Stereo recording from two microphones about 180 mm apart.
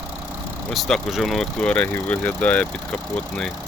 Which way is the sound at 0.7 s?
Centre (ahead or behind).